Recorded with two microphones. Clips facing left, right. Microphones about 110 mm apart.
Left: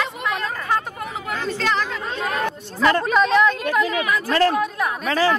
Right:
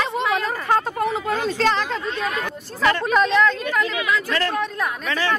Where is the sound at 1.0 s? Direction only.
30° right (ahead or behind).